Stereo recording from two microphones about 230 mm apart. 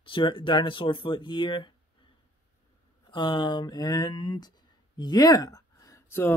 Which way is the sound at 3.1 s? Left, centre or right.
Left.